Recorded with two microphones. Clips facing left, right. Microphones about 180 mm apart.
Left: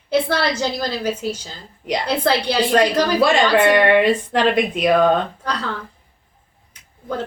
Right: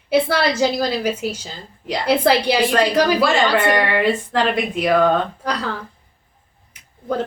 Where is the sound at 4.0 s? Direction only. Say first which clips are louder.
Left 2 dB; 20° left (ahead or behind).